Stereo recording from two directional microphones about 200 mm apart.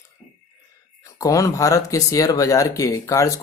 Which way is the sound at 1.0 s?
15° left (ahead or behind).